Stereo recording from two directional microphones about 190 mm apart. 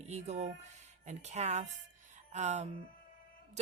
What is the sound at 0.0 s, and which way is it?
Speech, 35° right (ahead or behind).